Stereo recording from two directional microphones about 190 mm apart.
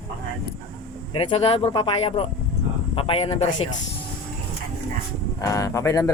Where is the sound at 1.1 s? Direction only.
30° left (ahead or behind).